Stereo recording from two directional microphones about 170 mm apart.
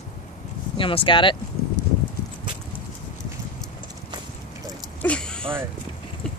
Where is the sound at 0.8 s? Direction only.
30° left (ahead or behind).